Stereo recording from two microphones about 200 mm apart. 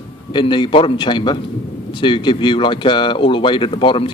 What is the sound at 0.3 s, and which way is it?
Speech, 25° left (ahead or behind).